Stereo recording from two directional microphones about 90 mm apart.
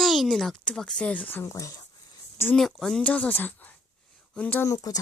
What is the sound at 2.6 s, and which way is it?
Speech, 5° left (ahead or behind).